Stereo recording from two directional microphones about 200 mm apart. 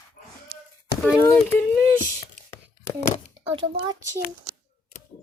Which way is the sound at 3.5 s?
25° right (ahead or behind).